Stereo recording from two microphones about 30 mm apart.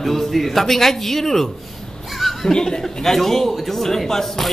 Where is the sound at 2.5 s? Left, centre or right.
Left.